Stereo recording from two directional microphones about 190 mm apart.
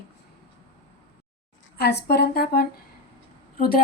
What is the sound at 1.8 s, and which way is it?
A woman's voice, 60° left (ahead or behind).